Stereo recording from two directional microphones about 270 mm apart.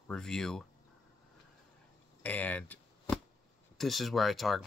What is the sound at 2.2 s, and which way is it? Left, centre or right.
Chop, centre.